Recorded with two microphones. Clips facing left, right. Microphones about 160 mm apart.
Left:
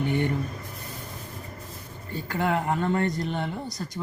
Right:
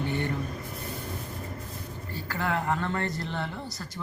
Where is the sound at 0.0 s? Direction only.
15° left (ahead or behind).